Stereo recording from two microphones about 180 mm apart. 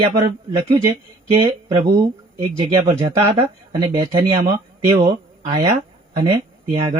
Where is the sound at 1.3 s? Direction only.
30° right (ahead or behind).